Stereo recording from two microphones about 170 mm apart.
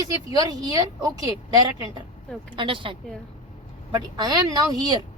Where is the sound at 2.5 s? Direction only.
30° right (ahead or behind).